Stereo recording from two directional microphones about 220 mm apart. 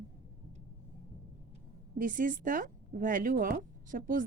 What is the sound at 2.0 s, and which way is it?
Speech, 35° right (ahead or behind).